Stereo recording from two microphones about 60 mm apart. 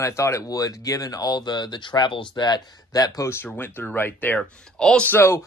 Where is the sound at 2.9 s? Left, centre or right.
Left.